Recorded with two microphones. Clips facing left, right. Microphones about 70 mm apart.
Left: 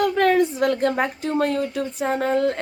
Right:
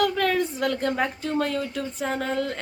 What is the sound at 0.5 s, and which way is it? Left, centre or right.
Speech, left.